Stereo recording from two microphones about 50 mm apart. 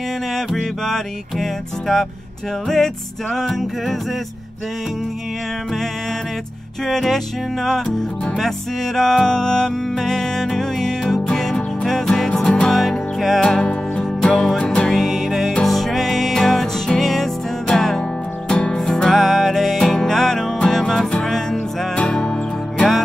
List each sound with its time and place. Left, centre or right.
0.3 s music: centre
6.9 s music: centre
14.6 s music: left
14.9 s music: centre
18.5 s music: left
18.8 s music: centre
22.1 s music: centre